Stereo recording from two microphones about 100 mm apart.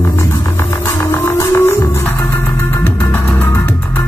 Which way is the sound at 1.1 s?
25° left (ahead or behind).